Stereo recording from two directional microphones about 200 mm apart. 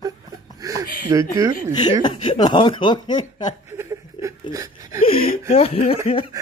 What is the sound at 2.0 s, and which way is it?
Speech, 25° left (ahead or behind).